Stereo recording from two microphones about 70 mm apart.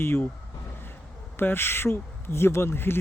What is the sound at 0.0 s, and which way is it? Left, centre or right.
Speech, left.